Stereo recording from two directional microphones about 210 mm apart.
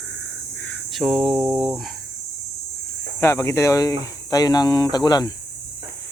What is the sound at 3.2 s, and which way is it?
Speech, 15° left (ahead or behind).